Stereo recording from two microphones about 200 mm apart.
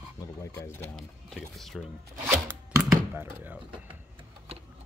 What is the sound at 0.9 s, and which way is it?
Speech, centre (ahead or behind).